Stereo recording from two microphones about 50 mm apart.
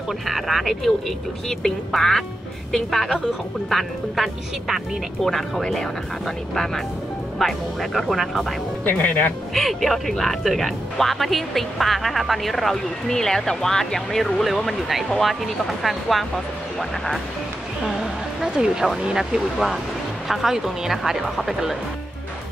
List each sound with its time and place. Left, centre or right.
0.3 s speech: centre
8.8 s speech: left
9.5 s speech: centre
18.4 s speech: centre